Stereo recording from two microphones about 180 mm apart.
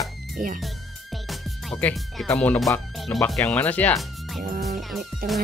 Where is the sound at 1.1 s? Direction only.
Centre (ahead or behind).